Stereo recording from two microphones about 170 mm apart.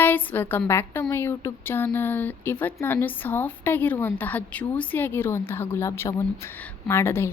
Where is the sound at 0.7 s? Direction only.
15° left (ahead or behind).